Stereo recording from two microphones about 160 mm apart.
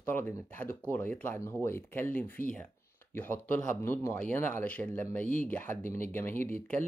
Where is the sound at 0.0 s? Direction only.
10° left (ahead or behind).